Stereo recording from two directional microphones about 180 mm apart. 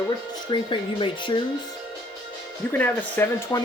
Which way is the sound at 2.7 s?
10° left (ahead or behind).